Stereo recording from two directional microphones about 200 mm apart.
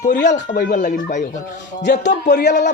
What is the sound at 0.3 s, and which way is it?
Speech, 40° left (ahead or behind).